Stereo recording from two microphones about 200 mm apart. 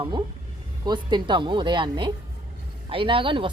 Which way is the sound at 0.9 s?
20° right (ahead or behind).